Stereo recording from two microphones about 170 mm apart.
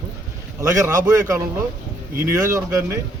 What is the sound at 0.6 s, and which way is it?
Speech, 20° right (ahead or behind).